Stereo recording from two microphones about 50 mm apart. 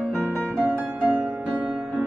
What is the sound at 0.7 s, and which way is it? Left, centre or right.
Music, right.